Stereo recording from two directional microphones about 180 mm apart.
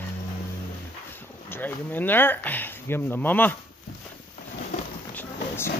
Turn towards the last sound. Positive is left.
turn(degrees=10)  # may be behind; listen again after turning